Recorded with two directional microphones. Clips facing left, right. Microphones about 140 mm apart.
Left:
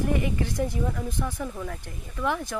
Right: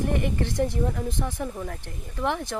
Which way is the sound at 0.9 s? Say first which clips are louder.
Right 1 dB; 40° right (ahead or behind).